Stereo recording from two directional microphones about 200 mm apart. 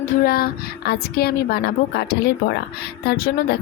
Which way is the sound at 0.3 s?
50° left (ahead or behind).